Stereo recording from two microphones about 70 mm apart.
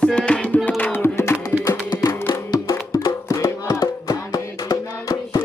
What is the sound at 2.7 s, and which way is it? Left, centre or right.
Music, left.